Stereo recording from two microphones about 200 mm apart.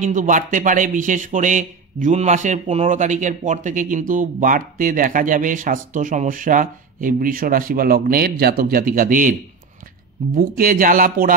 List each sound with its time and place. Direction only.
0.0 s speech: 40° right (ahead or behind)
10.3 s speech: 45° right (ahead or behind)